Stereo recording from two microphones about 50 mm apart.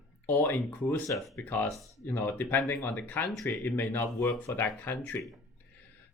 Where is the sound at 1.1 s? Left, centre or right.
Left.